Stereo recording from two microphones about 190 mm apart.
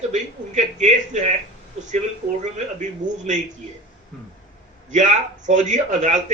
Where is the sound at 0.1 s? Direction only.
40° right (ahead or behind).